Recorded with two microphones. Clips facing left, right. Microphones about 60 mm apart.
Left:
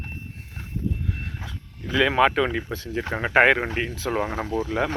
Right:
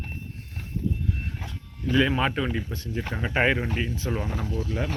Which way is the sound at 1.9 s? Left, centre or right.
Left.